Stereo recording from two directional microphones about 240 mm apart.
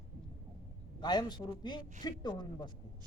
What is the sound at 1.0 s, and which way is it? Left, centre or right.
A man's voice, centre.